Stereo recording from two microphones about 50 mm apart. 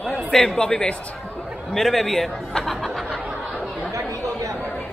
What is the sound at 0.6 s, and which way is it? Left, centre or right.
Speech, centre.